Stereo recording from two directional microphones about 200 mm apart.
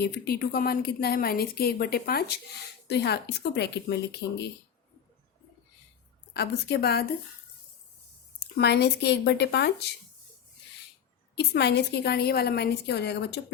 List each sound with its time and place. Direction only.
0.0 s a woman's voice: 50° left (ahead or behind)
6.3 s a woman's voice: 55° left (ahead or behind)
8.5 s a woman's voice: 55° left (ahead or behind)
11.3 s a woman's voice: 55° left (ahead or behind)